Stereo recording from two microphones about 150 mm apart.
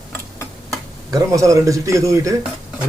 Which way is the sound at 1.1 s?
20° right (ahead or behind).